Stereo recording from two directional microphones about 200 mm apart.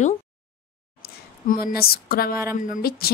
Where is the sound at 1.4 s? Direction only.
45° left (ahead or behind).